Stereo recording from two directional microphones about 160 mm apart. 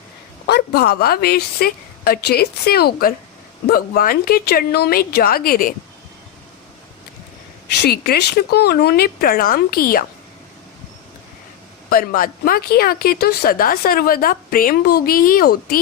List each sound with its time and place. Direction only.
0.4 s speech: 80° left
7.8 s speech: 80° left
11.9 s speech: 65° left (ahead or behind)